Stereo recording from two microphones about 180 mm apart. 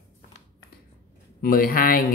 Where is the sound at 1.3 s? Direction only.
50° left (ahead or behind).